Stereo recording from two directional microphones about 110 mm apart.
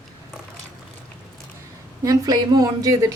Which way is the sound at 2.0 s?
35° right (ahead or behind).